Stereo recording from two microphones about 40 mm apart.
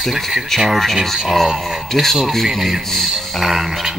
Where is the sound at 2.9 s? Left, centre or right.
Centre.